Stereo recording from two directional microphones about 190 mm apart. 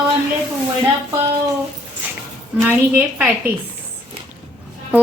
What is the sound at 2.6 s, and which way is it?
Speech, 10° right (ahead or behind).